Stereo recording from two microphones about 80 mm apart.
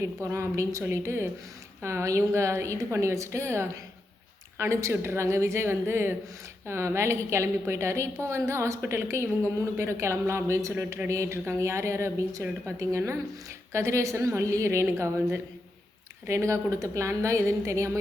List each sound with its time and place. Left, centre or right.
0.0 s a woman's voice: right